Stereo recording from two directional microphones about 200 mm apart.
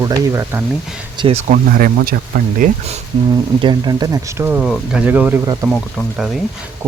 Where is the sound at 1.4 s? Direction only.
40° right (ahead or behind).